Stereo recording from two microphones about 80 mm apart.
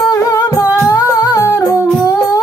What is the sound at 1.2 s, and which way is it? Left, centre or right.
Humming, left.